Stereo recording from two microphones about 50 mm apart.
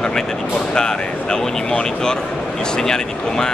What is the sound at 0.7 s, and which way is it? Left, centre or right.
Speech, centre.